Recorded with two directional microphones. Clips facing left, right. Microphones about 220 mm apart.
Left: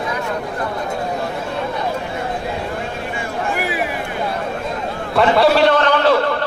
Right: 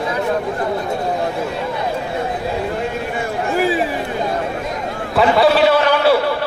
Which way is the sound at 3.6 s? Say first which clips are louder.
Right 6 dB; 30° right (ahead or behind).